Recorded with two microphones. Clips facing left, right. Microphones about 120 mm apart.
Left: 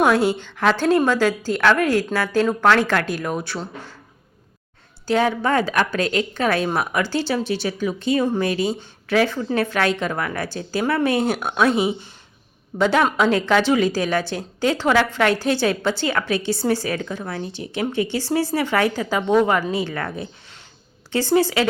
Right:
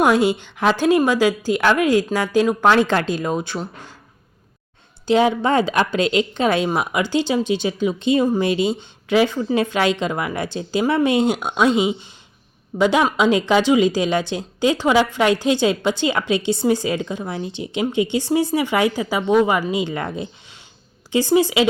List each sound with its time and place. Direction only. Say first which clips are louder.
0.0 s a woman's voice: right 1 dB; 15° right (ahead or behind)
5.0 s a woman's voice: right 3 dB; 20° right (ahead or behind)